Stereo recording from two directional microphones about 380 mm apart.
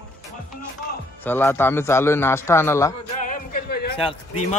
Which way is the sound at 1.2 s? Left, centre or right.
Centre.